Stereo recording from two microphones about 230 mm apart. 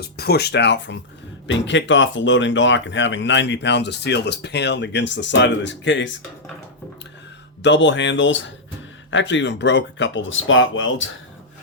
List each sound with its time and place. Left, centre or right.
0.0 s speech: left
7.6 s speech: left